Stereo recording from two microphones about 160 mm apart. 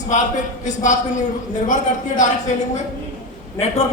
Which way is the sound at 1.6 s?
50° left (ahead or behind).